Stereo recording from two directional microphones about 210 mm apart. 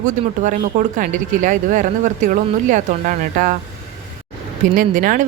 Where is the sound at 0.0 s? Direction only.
35° right (ahead or behind).